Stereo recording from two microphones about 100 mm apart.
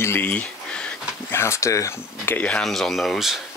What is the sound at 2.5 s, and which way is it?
Speech, centre (ahead or behind).